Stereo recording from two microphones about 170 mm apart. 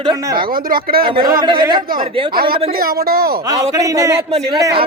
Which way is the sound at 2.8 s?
60° right (ahead or behind).